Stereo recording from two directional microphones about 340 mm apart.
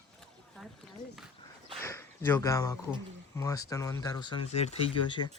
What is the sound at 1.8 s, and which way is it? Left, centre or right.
Speech, centre.